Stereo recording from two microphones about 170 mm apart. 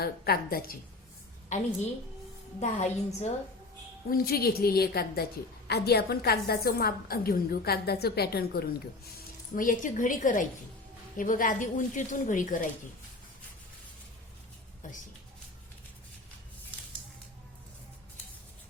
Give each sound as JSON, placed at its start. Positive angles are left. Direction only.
{"t": 0.0, "sound": "a woman's voice", "side_deg": 60}
{"t": 2.6, "sound": "a woman's voice", "side_deg": 40}
{"t": 4.1, "sound": "a woman's voice", "side_deg": 65}
{"t": 9.1, "sound": "a woman's voice", "side_deg": 50}